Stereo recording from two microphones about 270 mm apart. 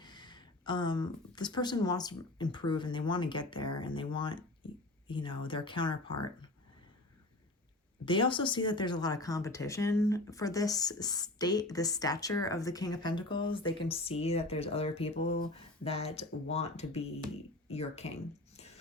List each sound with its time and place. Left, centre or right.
0.0 s speech: centre
8.0 s speech: centre
18.5 s music: left